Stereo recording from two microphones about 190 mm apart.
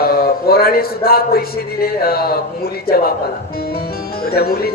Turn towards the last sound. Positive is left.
turn(degrees=55)  # may be behind; listen again after turning